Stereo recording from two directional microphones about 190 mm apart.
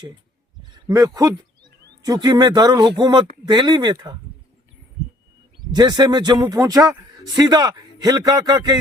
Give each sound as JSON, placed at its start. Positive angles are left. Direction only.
{"t": 0.9, "sound": "a man's voice", "side_deg": -20}
{"t": 5.7, "sound": "a man's voice", "side_deg": -20}